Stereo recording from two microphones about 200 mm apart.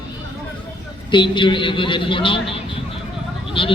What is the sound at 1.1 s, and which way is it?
A man's voice, 25° left (ahead or behind).